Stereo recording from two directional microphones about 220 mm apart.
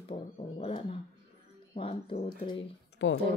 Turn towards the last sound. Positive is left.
turn(degrees=60)  # may be behind; listen again after turning